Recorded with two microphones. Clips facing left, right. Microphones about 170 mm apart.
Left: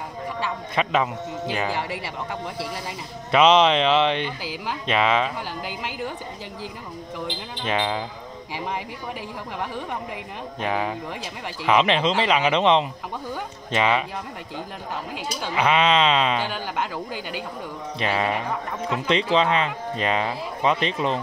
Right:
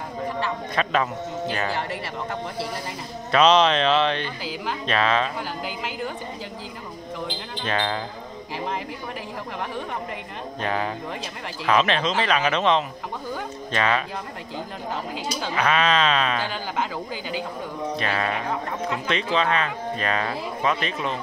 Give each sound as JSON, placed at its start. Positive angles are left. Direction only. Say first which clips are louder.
{"t": 0.8, "sound": "speech", "louder": "left 2 dB", "side_deg": 15}
{"t": 3.3, "sound": "speech", "louder": "left 1 dB", "side_deg": 20}
{"t": 7.6, "sound": "speech", "louder": "left 1 dB", "side_deg": 10}
{"t": 10.6, "sound": "speech", "louder": "left 1 dB", "side_deg": 10}
{"t": 15.5, "sound": "speech", "louder": "left 2 dB", "side_deg": 25}
{"t": 16.3, "sound": "speech", "louder": "even", "side_deg": 0}
{"t": 18.0, "sound": "speech", "louder": "left 4 dB", "side_deg": 20}
{"t": 19.3, "sound": "speech", "louder": "even", "side_deg": 25}